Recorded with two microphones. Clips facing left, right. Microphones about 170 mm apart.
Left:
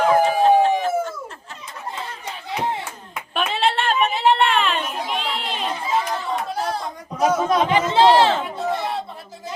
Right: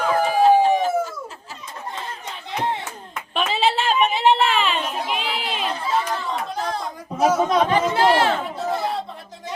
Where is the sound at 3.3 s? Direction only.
Centre (ahead or behind).